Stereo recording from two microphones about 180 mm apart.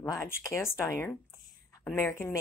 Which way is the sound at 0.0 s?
15° left (ahead or behind).